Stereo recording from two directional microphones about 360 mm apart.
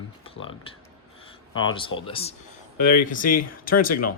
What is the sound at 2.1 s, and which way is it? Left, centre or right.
Speech, centre.